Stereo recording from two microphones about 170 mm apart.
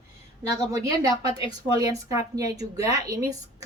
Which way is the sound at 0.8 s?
20° right (ahead or behind).